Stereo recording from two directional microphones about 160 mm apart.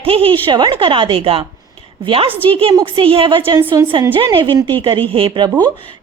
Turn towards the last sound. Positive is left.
turn(degrees=-30)  # may be behind; listen again after turning